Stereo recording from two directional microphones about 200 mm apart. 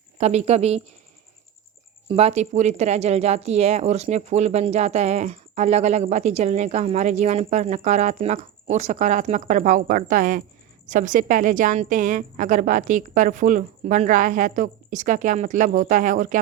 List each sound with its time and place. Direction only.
0.2 s speech: 35° right (ahead or behind)
2.0 s speech: 30° right (ahead or behind)